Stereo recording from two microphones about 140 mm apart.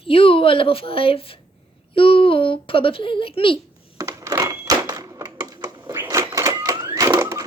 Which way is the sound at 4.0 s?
25° right (ahead or behind).